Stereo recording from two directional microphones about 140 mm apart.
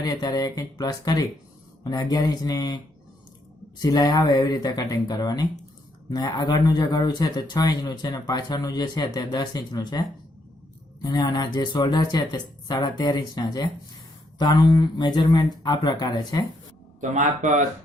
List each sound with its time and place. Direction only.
0.0 s speech: 25° left (ahead or behind)
11.0 s speech: 25° left (ahead or behind)